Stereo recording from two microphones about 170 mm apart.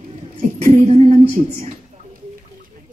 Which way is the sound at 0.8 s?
35° right (ahead or behind).